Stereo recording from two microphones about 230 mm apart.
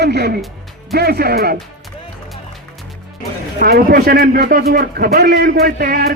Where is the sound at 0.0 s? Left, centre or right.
Right.